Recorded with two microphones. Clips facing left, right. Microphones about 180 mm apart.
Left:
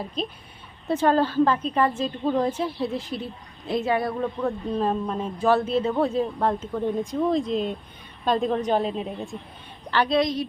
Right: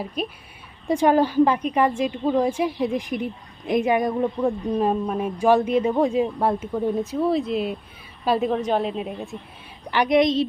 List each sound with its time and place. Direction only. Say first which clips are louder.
0.0 s a woman's voice: right 2 dB; 10° right (ahead or behind)
9.9 s a woman's voice: right 4 dB; 15° right (ahead or behind)